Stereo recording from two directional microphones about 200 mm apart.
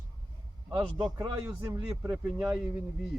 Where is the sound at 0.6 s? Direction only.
20° right (ahead or behind); by 2.6 s 5° right (ahead or behind).